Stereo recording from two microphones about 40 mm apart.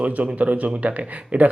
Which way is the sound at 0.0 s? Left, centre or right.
Right.